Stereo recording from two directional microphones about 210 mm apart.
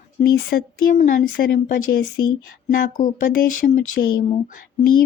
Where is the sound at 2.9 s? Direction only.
40° left (ahead or behind).